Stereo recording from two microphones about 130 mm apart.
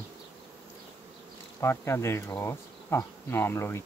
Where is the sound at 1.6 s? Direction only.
20° left (ahead or behind).